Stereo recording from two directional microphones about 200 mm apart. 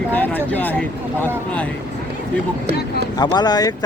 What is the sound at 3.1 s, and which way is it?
Speech, 20° left (ahead or behind).